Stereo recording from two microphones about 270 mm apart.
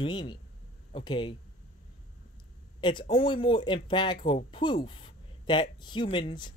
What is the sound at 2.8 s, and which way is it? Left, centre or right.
Speech, centre.